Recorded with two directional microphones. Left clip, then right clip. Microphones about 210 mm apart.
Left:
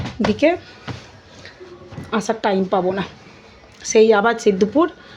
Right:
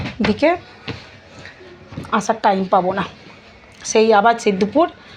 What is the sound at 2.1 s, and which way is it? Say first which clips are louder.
A woman's voice: right 3 dB; 25° left (ahead or behind).